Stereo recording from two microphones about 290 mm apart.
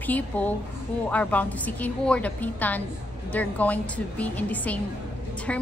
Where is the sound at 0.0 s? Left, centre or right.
Centre.